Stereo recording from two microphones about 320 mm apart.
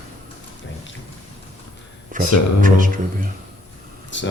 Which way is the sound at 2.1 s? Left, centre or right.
Right.